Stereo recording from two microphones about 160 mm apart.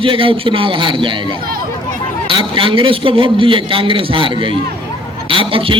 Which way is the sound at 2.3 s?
30° right (ahead or behind).